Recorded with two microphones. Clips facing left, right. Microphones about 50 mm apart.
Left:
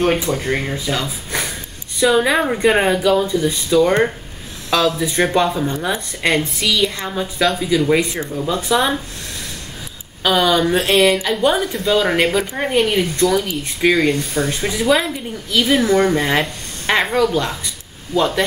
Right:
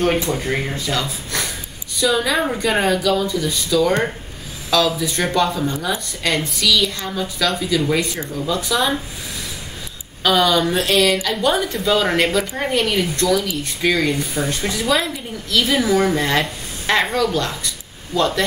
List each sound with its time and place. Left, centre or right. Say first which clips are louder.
0.0 s speech: left 1 dB; centre; by 8.9 s left
10.2 s speech: left 1 dB; centre
10.8 s speech: left 2 dB; left
11.5 s speech: left 1 dB; centre
14.1 s speech: left 2 dB; centre
14.6 s speech: left 3 dB; centre
15.8 s speech: left 2 dB; centre
16.2 s speech: left 1 dB; centre